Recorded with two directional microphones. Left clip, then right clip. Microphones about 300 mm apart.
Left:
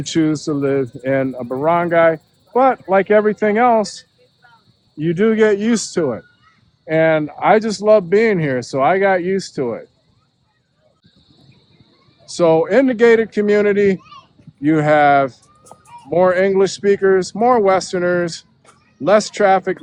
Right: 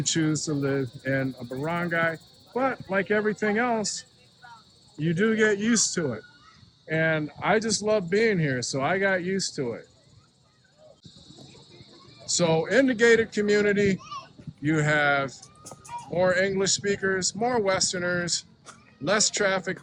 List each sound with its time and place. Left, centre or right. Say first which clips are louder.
0.0 s speech: left 9 dB; centre
4.9 s speech: left 9 dB; centre
12.3 s speech: left 10 dB; centre
14.0 s a sound: right 2 dB; right
14.6 s speech: left 11 dB; centre